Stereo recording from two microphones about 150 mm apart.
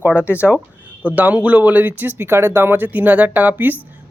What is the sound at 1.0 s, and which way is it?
Speech, 10° right (ahead or behind).